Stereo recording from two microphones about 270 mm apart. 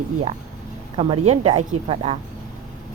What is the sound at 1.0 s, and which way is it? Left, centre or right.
A woman's voice, right.